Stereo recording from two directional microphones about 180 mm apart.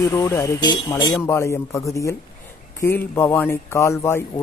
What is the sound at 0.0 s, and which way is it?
A man's voice, 15° left (ahead or behind).